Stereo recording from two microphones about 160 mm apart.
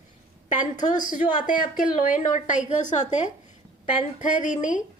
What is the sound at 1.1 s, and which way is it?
A woman's voice, 55° left (ahead or behind).